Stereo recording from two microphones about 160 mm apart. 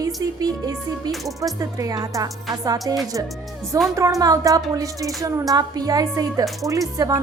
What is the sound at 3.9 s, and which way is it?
A woman's voice, 20° right (ahead or behind).